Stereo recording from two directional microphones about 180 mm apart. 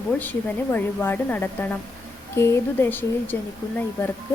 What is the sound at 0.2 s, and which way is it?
A woman's voice, 10° left (ahead or behind).